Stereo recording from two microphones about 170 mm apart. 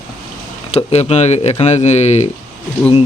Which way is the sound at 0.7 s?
40° left (ahead or behind).